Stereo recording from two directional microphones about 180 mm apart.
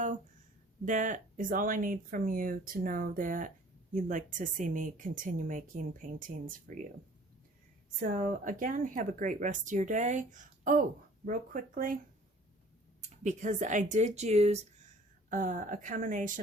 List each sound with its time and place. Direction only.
0.9 s speech: 45° right (ahead or behind)
7.9 s speech: 45° right (ahead or behind)
13.2 s speech: 45° right (ahead or behind)
15.3 s speech: 45° right (ahead or behind)